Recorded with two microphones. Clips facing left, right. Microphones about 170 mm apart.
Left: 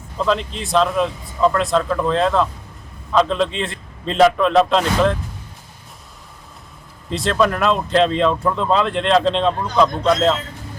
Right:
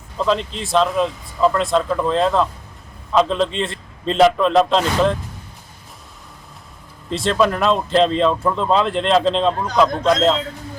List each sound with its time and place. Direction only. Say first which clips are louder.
0.2 s a man's voice: even; centre (ahead or behind)
7.1 s speech: right 1 dB; centre (ahead or behind)